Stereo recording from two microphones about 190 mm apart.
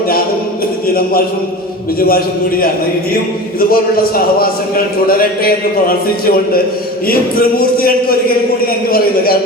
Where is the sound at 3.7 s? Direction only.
50° left (ahead or behind).